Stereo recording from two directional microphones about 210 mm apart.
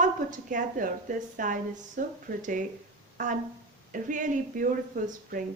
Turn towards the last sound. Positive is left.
turn(degrees=-40)  # may be behind; listen again after turning